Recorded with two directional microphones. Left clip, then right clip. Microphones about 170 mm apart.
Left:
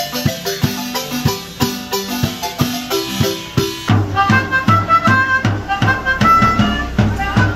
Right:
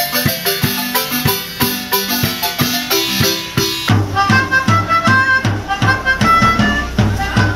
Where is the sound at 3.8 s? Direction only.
Centre (ahead or behind).